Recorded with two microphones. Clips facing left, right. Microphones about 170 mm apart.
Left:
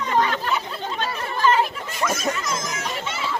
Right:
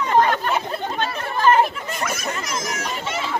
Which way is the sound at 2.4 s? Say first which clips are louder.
Right 1 dB; 65° right (ahead or behind).